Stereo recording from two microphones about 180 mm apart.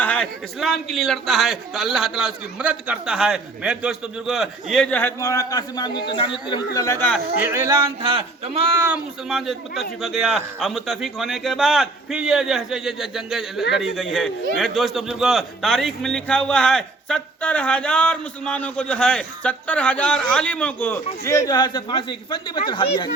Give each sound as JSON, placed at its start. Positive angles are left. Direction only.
{"t": 0.0, "sound": "a man's voice", "side_deg": 5}
{"t": 6.7, "sound": "speech", "side_deg": 15}
{"t": 7.4, "sound": "a sound", "side_deg": -15}
{"t": 8.0, "sound": "speech", "side_deg": -30}
{"t": 9.3, "sound": "a man's voice", "side_deg": 0}